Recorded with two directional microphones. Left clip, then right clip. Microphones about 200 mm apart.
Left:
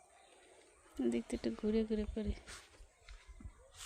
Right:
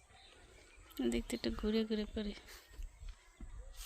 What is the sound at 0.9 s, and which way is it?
Speech, centre (ahead or behind).